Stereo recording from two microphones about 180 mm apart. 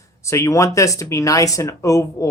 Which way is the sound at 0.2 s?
15° left (ahead or behind).